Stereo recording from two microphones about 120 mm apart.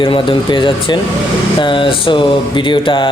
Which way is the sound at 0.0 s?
45° left (ahead or behind).